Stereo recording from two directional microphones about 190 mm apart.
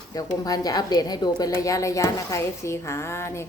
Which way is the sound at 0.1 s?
20° left (ahead or behind).